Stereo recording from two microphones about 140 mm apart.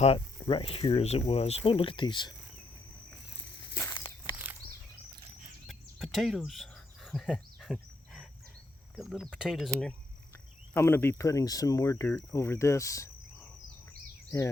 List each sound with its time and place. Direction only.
0.0 s speech: 40° left (ahead or behind)
3.8 s walk: 20° left (ahead or behind)
5.6 s a sound: centre (ahead or behind)
9.0 s speech: centre (ahead or behind)
10.8 s speech: 15° left (ahead or behind)
14.3 s speech: 20° left (ahead or behind)